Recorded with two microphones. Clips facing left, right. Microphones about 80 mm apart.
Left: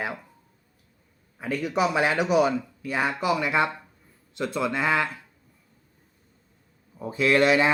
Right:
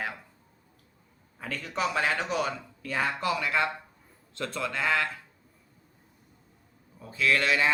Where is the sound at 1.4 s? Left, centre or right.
Centre.